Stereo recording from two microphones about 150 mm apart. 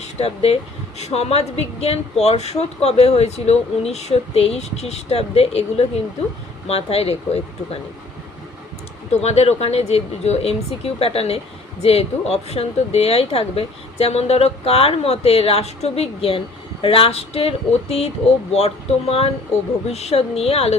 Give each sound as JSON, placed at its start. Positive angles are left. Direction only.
{"t": 0.0, "sound": "a woman's voice", "side_deg": 45}
{"t": 9.2, "sound": "a woman's voice", "side_deg": 45}